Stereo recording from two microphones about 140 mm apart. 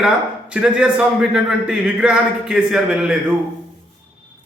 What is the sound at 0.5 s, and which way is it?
A man's voice, 5° right (ahead or behind).